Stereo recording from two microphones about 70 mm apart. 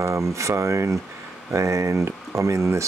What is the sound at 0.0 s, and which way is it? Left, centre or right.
Speech, right.